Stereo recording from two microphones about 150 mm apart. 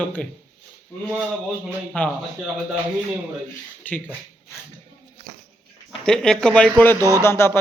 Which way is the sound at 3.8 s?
10° left (ahead or behind).